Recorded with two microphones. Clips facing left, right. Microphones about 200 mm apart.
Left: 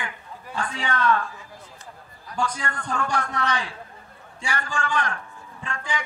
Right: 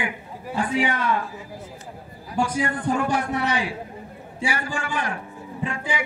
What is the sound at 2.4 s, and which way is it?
A man's voice, 10° right (ahead or behind).